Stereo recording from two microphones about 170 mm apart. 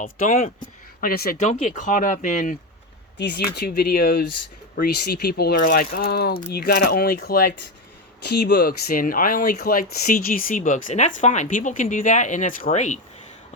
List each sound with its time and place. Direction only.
0.0 s speech: 50° left (ahead or behind)
1.0 s speech: 60° left (ahead or behind)
3.2 s speech: 80° left; by 7.5 s 65° left (ahead or behind)
8.2 s speech: 80° left; by 13.0 s 45° left (ahead or behind)